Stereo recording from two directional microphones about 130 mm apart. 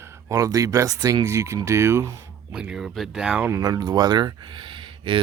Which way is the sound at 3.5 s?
30° right (ahead or behind).